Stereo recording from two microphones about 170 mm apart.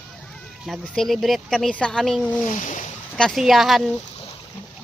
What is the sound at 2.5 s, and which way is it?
Speech, 50° left (ahead or behind).